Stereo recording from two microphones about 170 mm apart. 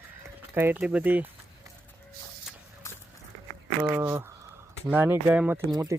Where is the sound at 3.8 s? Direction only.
20° right (ahead or behind).